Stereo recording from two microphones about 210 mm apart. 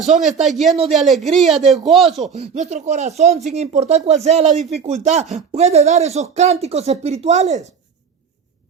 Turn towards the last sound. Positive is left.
turn(degrees=-35)  # may be behind; listen again after turning